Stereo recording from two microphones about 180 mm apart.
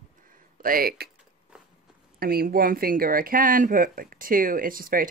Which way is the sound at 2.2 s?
55° right (ahead or behind).